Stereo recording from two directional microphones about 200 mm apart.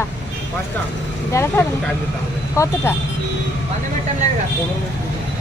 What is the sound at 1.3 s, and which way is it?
Speech, 15° left (ahead or behind).